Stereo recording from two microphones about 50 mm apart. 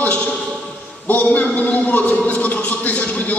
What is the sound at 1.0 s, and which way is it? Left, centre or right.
A man's voice, left.